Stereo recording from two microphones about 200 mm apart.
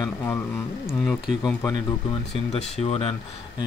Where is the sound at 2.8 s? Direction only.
30° left (ahead or behind).